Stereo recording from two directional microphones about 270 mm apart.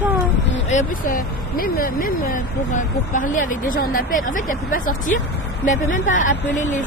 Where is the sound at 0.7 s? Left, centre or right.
Left.